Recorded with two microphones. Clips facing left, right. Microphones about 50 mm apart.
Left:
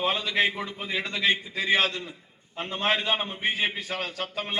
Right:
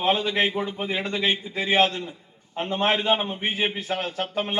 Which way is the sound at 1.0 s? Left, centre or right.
Centre.